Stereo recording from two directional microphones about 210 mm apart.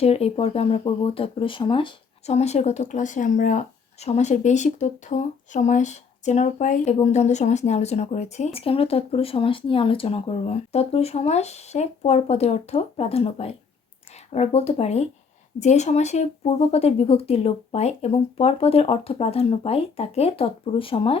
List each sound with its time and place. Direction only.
0.0 s speech: 30° left (ahead or behind)